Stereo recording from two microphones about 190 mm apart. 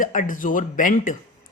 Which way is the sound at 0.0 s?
45° left (ahead or behind).